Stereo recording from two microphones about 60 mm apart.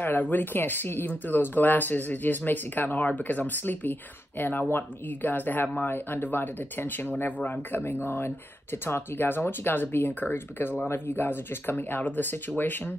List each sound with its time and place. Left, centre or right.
0.0 s speech: left